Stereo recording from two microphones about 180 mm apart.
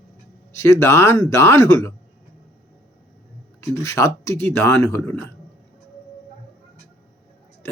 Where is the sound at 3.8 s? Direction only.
15° left (ahead or behind).